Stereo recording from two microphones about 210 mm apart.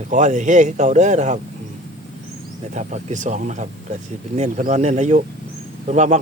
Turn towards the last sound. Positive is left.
turn(degrees=-35)  # may be behind; listen again after turning